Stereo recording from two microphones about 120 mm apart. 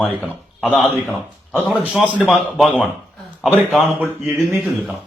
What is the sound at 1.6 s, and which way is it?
A man's voice, 5° right (ahead or behind).